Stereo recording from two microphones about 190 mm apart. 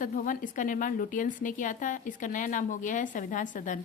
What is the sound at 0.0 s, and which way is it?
A woman's voice, 45° left (ahead or behind).